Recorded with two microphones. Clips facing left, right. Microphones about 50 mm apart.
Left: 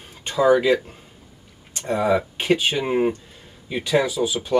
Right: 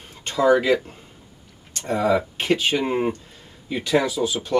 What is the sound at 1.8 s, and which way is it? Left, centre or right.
Speech, centre.